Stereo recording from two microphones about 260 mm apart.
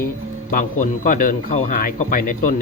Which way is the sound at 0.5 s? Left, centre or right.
Left.